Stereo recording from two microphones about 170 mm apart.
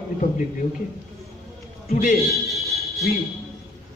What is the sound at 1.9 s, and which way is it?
Speech, 50° left (ahead or behind).